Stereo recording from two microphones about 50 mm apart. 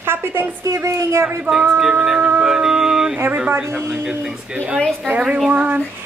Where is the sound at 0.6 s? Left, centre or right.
Right.